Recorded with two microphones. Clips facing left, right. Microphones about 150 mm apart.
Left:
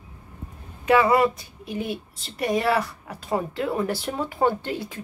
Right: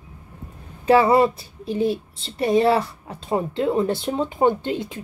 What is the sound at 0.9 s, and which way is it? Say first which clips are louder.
Speech: right 3 dB; 30° right (ahead or behind).